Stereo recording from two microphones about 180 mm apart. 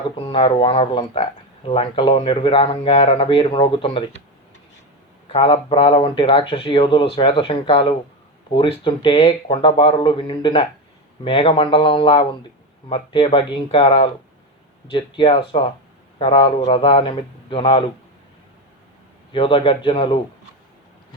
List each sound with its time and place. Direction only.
0.3 s speech: 30° left (ahead or behind)
5.3 s speech: 30° left (ahead or behind)
19.3 s speech: 30° left (ahead or behind)